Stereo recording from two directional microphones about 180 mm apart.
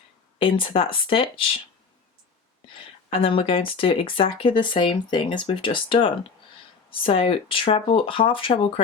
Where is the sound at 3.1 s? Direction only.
30° left (ahead or behind).